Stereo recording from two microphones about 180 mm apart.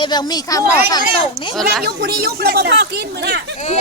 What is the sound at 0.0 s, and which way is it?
Speech, 25° left (ahead or behind).